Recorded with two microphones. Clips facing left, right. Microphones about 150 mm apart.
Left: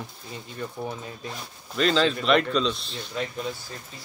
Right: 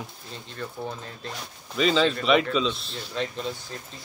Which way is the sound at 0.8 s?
10° left (ahead or behind).